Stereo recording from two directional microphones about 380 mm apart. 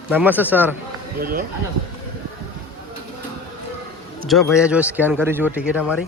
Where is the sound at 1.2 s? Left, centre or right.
Right.